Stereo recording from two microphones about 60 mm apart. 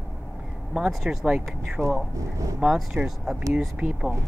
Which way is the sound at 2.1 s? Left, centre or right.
Right.